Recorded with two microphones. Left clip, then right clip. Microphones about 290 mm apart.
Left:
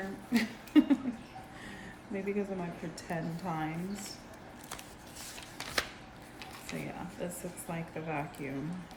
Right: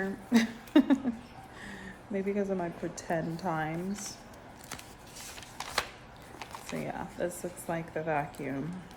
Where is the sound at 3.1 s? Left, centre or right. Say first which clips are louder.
Right 5 dB; centre.